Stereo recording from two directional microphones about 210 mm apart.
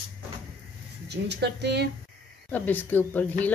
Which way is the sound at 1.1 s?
55° right (ahead or behind).